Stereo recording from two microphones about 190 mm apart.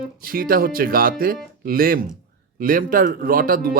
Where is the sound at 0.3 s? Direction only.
50° right (ahead or behind).